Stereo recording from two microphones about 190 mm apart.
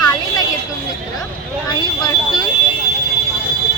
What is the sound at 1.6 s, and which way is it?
Vehicle, 25° left (ahead or behind).